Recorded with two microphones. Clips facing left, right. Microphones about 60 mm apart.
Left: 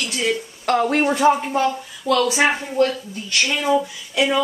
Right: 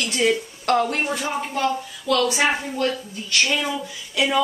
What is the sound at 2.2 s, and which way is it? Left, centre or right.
Speech, centre.